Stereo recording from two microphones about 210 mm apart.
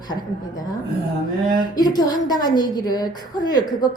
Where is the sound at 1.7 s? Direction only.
20° left (ahead or behind).